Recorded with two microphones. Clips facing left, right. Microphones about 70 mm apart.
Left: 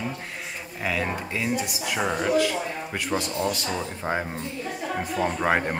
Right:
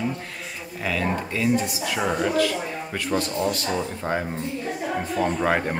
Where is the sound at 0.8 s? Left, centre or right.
Centre.